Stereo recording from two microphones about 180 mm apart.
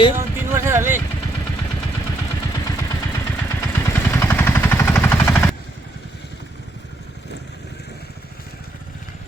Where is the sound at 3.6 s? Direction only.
15° left (ahead or behind).